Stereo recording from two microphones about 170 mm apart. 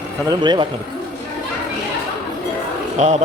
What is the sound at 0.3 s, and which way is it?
Speech, 25° right (ahead or behind).